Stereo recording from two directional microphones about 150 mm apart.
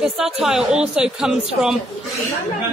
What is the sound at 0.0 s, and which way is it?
A woman's voice, centre (ahead or behind).